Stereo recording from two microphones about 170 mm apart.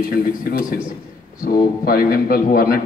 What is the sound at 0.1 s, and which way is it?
Speech, 60° left (ahead or behind).